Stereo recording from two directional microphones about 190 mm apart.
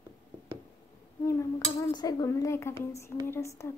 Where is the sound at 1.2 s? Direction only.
15° left (ahead or behind).